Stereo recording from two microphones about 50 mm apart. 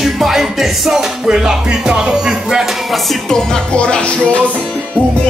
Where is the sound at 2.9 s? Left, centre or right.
Centre.